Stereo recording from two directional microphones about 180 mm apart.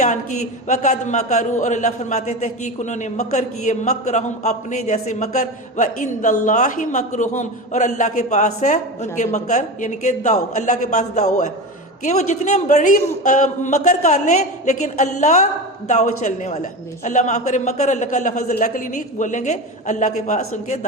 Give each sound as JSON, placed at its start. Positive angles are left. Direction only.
{"t": 0.0, "sound": "a man's voice", "side_deg": 40}